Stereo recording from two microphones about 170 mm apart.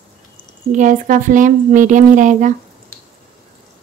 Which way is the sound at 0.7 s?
50° right (ahead or behind).